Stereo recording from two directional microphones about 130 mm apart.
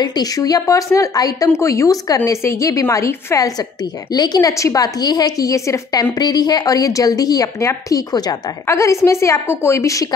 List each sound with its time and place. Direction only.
0.0 s a woman's voice: 30° left (ahead or behind)